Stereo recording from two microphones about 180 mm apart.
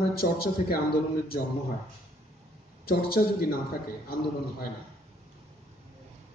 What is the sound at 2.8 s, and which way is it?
Speech, 55° left (ahead or behind).